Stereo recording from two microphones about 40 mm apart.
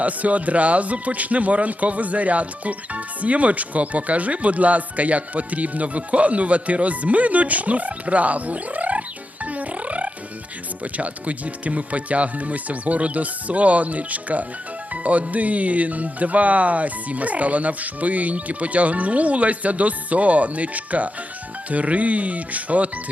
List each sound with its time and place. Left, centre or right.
0.0 s speech: right